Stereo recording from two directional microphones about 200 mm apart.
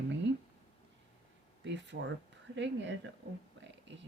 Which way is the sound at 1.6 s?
60° right (ahead or behind).